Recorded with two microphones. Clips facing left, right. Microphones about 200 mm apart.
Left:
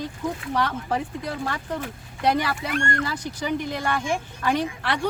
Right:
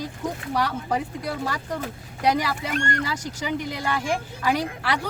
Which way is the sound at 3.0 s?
10° right (ahead or behind).